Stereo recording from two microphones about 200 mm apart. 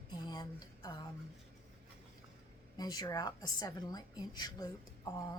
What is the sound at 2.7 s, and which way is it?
Speech, 20° left (ahead or behind).